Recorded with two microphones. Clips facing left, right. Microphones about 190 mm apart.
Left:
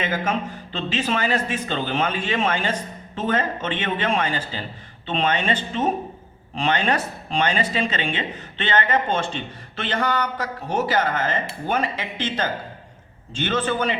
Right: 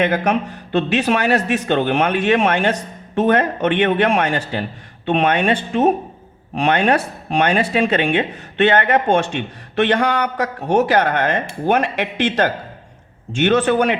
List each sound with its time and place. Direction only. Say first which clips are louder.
0.0 s speech: right 7 dB; 65° right (ahead or behind)
13.3 s speech: right 8 dB; 70° right (ahead or behind)